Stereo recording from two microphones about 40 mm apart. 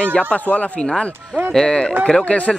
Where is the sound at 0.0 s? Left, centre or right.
Left.